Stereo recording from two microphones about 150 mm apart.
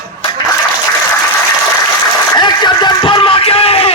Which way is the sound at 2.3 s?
30° left (ahead or behind).